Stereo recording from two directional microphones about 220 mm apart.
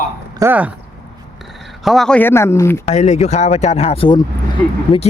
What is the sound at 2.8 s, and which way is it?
Speech, 30° left (ahead or behind).